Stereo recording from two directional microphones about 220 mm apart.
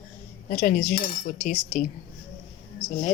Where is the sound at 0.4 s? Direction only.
40° left (ahead or behind).